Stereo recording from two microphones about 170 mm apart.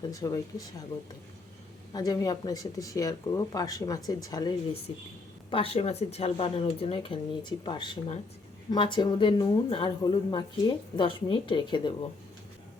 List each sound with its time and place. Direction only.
0.0 s speech: 20° left (ahead or behind)
1.9 s speech: 20° left (ahead or behind)